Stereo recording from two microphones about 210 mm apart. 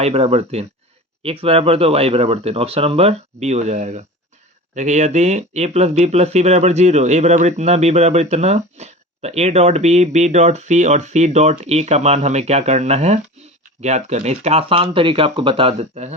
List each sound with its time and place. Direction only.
0.0 s speech: 30° right (ahead or behind)